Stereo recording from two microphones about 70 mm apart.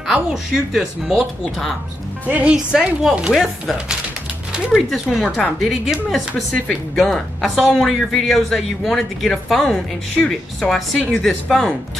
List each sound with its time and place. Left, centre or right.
0.0 s speech: centre
2.2 s speech: right
2.5 s speech: centre